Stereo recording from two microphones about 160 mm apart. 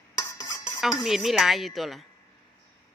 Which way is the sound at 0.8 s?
Centre (ahead or behind).